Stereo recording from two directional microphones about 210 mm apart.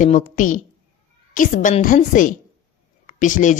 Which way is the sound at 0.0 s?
40° left (ahead or behind).